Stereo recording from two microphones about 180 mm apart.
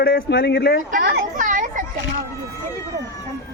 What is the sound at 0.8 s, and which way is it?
Children playing, 55° right (ahead or behind).